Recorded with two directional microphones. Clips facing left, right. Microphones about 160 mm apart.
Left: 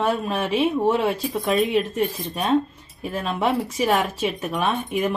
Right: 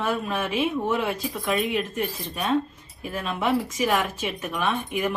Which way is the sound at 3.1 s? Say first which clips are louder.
Left 2 dB; 35° left (ahead or behind).